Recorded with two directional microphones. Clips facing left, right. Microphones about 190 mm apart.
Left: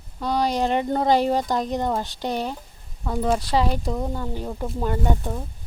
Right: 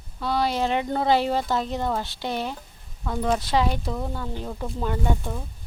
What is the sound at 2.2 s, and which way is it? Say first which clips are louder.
Speech: left 2 dB; 40° left (ahead or behind).